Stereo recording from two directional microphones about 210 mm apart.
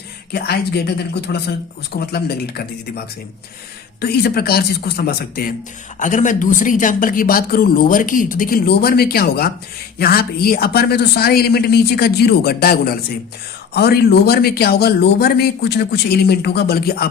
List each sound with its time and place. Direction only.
0.3 s a man's voice: 50° left (ahead or behind)
4.0 s a man's voice: 50° left (ahead or behind)